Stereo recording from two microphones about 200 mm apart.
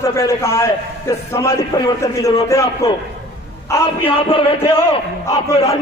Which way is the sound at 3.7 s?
15° left (ahead or behind).